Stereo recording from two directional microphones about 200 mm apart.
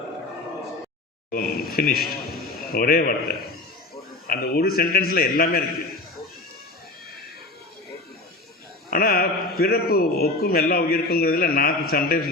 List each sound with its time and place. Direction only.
1.3 s a man's voice: 50° left (ahead or behind)
8.9 s a man's voice: 50° left (ahead or behind)